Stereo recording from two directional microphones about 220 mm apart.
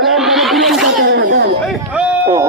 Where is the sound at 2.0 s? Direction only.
10° right (ahead or behind).